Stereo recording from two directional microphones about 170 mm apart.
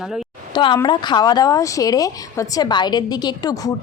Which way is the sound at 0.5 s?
25° left (ahead or behind).